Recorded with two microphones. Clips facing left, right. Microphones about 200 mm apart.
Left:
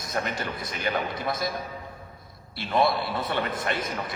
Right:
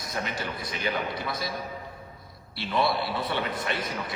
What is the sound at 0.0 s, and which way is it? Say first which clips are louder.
A man's voice: left 3 dB; 50° left (ahead or behind).